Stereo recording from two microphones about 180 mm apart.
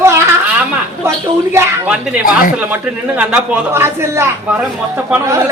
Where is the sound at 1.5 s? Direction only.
10° right (ahead or behind).